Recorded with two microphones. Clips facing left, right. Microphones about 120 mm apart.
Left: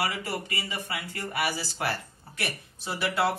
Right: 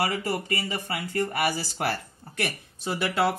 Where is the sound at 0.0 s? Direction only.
45° right (ahead or behind).